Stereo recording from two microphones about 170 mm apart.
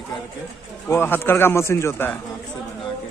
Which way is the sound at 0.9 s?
15° left (ahead or behind).